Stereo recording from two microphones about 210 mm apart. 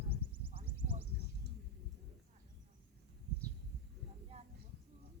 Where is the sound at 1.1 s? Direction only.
50° right (ahead or behind).